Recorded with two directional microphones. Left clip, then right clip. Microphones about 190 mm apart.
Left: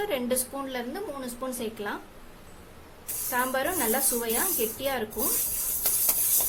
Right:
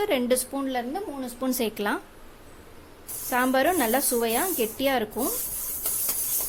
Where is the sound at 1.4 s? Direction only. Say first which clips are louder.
Right 8 dB; 40° right (ahead or behind).